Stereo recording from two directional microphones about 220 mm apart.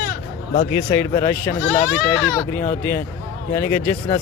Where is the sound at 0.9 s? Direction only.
15° left (ahead or behind).